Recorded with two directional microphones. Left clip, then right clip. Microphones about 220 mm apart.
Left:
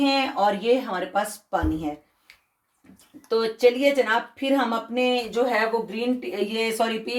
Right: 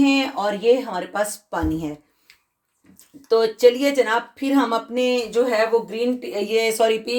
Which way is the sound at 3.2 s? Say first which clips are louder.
Right 5 dB; 45° right (ahead or behind).